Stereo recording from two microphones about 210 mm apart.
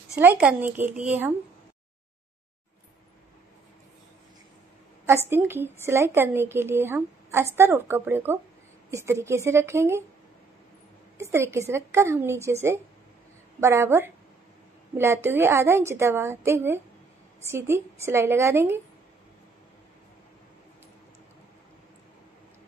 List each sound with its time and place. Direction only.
0.2 s a woman's voice: 5° right (ahead or behind)
5.0 s a woman's voice: 10° right (ahead or behind)
11.1 s a woman's voice: 15° right (ahead or behind)
13.6 s a woman's voice: 10° right (ahead or behind)